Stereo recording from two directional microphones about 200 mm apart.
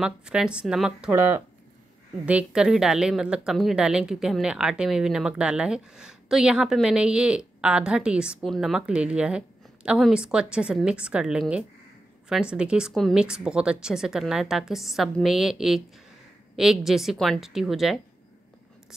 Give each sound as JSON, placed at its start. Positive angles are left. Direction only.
{"t": 0.0, "sound": "a woman's voice", "side_deg": -5}